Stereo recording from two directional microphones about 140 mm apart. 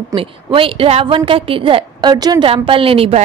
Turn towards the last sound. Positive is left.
turn(degrees=-40)  # may be behind; listen again after turning